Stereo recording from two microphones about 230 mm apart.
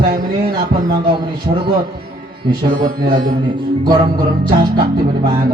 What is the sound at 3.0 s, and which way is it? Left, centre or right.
Speech, right.